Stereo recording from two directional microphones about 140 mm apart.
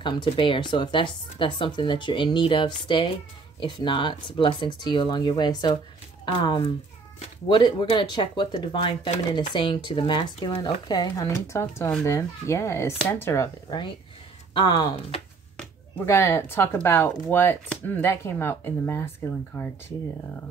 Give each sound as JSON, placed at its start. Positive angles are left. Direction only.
{"t": 0.0, "sound": "speech", "side_deg": 35}
{"t": 16.1, "sound": "speech", "side_deg": 20}